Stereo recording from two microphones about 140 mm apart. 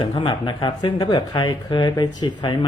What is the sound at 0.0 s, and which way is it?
Speech, 35° left (ahead or behind).